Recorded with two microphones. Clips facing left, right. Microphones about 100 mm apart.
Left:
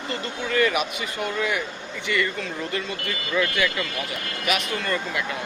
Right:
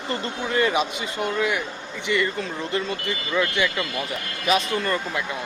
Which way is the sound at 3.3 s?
25° right (ahead or behind).